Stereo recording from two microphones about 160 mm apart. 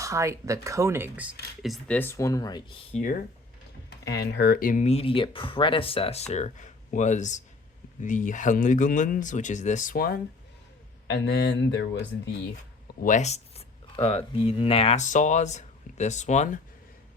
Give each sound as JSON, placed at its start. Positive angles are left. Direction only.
{"t": 0.0, "sound": "speech", "side_deg": -20}
{"t": 2.0, "sound": "speech", "side_deg": 15}
{"t": 2.9, "sound": "speech", "side_deg": 55}
{"t": 3.8, "sound": "speech", "side_deg": 90}
{"t": 11.1, "sound": "speech", "side_deg": 90}
{"t": 13.0, "sound": "a sound", "side_deg": 50}
{"t": 14.3, "sound": "speech", "side_deg": 35}